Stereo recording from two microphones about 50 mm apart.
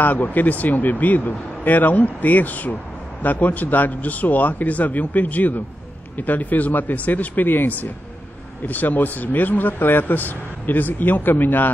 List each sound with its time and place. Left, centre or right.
0.0 s speech: left